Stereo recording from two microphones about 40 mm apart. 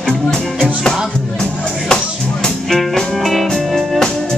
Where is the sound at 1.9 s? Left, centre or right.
Centre.